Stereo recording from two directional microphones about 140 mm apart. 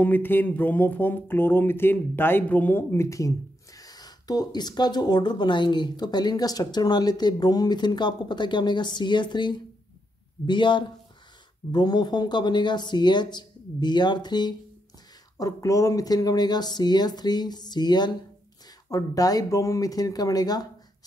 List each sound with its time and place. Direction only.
0.0 s speech: 15° left (ahead or behind)